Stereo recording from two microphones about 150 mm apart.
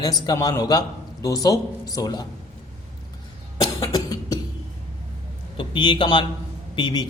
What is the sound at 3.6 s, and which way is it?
Cough, 25° left (ahead or behind).